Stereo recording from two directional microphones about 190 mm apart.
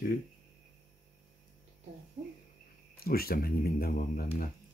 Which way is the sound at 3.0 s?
55° left (ahead or behind).